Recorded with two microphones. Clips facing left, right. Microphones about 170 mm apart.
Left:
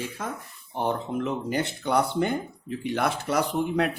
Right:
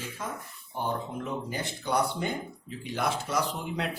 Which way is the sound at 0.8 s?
80° left.